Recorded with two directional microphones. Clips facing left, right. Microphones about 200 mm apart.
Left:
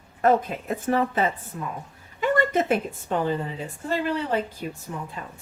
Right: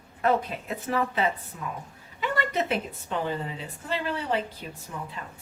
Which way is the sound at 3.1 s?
45° left (ahead or behind).